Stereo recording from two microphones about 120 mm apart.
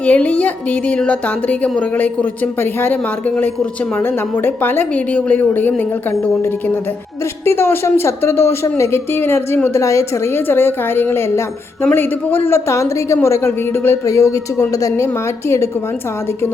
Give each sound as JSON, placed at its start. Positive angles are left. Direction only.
{"t": 0.0, "sound": "a man's voice", "side_deg": 10}